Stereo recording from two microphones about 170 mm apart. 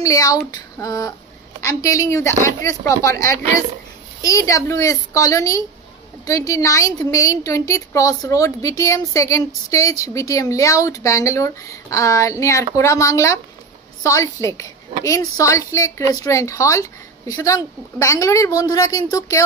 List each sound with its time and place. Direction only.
0.0 s a woman's voice: 20° left (ahead or behind)